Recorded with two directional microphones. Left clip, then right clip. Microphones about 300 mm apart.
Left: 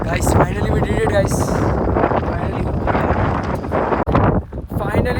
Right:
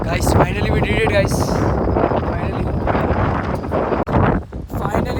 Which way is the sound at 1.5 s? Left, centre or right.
Centre.